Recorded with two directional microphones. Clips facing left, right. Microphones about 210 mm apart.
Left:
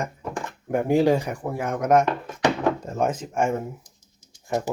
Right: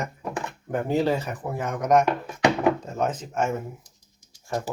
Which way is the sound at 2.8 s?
10° left (ahead or behind).